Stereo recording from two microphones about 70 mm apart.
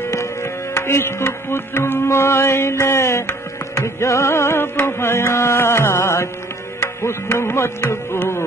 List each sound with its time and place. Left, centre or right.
0.0 s music: left
7.3 s music: left